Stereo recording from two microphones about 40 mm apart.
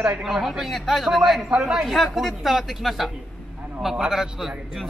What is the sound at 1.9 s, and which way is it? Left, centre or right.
A man's voice, centre.